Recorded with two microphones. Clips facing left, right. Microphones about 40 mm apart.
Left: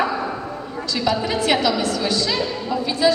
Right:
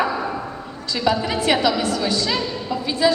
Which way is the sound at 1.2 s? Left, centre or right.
Centre.